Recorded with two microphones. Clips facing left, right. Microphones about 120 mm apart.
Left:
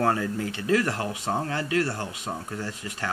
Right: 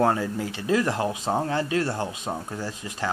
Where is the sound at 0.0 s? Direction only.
20° right (ahead or behind).